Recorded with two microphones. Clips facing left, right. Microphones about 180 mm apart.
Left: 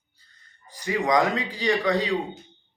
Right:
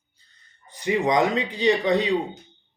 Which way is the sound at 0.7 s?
20° right (ahead or behind).